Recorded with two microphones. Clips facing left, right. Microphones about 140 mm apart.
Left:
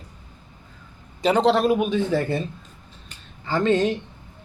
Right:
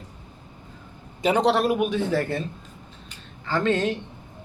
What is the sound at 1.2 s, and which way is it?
Speech, 10° right (ahead or behind).